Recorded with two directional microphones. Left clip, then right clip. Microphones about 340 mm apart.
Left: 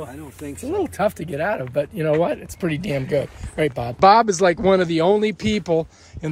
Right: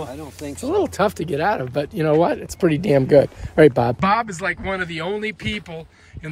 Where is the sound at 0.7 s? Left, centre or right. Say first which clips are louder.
Right 2 dB; centre; by 3.9 s right.